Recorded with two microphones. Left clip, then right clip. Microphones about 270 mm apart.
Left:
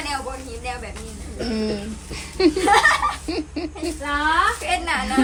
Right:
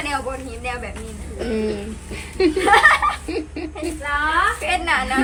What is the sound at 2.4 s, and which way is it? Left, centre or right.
A woman's voice, centre.